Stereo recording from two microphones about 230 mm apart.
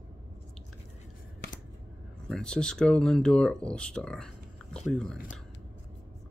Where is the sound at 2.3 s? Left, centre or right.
Centre.